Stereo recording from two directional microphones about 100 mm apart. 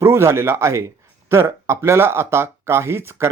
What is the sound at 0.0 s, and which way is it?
Speech, 25° right (ahead or behind).